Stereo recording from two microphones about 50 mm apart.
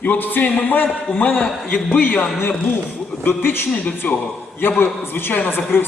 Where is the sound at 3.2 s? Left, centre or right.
Left.